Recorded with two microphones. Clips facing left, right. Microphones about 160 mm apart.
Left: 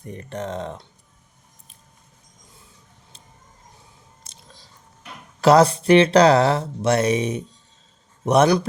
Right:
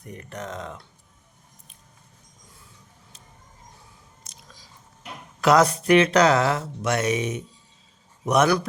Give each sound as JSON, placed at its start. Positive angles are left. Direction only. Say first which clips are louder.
{"t": 0.0, "sound": "speech", "louder": "left 5 dB", "side_deg": 30}
{"t": 4.2, "sound": "biting", "louder": "left 1 dB", "side_deg": 30}
{"t": 5.4, "sound": "a man's voice", "louder": "left 4 dB", "side_deg": 30}